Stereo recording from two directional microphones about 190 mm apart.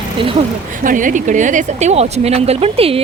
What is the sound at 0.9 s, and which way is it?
A woman's voice, 45° right (ahead or behind).